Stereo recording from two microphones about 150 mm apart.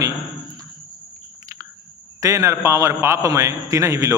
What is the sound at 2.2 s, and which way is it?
A man's voice, 20° right (ahead or behind).